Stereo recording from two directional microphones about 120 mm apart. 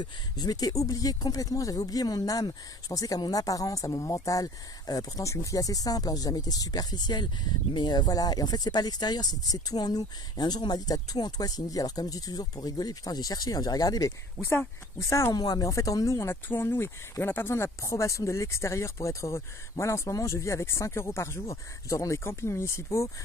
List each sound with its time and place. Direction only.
0.0 s speech: 35° left (ahead or behind)
14.4 s speech: 20° left (ahead or behind)